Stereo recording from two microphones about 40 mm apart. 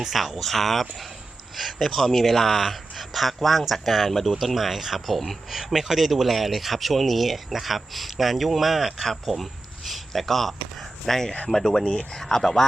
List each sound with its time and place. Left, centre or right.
0.1 s speech: centre
2.0 s speech: centre